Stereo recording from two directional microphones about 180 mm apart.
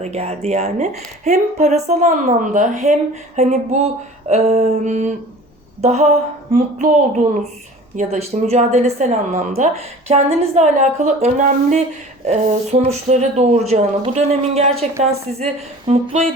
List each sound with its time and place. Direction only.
0.0 s a child's voice: 35° right (ahead or behind)